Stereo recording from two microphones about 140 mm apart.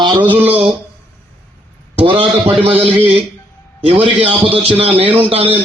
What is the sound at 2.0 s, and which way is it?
Speech, 40° right (ahead or behind).